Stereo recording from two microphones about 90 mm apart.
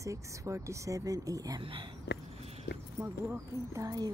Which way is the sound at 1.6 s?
70° right (ahead or behind).